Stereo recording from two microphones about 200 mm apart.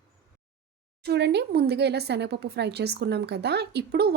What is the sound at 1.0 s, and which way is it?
Speech, 55° right (ahead or behind).